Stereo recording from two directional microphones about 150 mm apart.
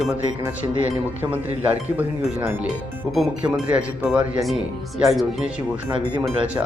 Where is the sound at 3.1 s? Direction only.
Centre (ahead or behind).